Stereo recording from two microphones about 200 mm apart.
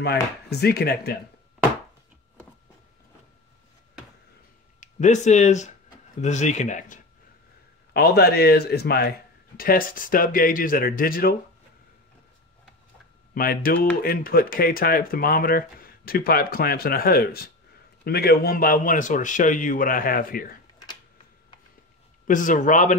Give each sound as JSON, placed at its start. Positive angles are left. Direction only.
{"t": 0.0, "sound": "speech", "side_deg": 55}
{"t": 4.7, "sound": "speech", "side_deg": 35}
{"t": 7.9, "sound": "speech", "side_deg": 55}
{"t": 13.3, "sound": "speech", "side_deg": 45}
{"t": 22.2, "sound": "speech", "side_deg": 40}